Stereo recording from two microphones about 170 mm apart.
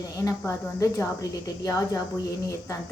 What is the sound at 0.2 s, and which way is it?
Speech, 20° left (ahead or behind).